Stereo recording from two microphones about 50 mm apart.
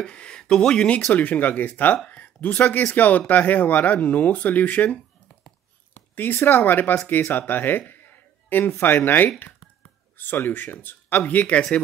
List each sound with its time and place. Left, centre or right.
0.0 s speech: centre
6.1 s speech: left
7.9 s a sound: left
10.1 s speech: left